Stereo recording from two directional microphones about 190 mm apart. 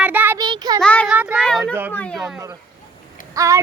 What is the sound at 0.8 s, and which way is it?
Speech, 5° left (ahead or behind).